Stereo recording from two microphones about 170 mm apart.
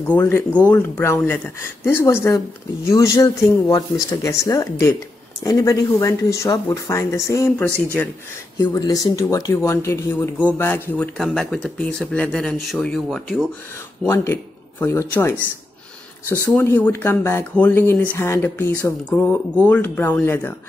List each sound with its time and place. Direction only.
0.1 s speech: 15° left (ahead or behind)
8.5 s speech: 20° left (ahead or behind); by 13.5 s centre (ahead or behind)
14.0 s speech: 15° left (ahead or behind)
16.4 s speech: 15° left (ahead or behind)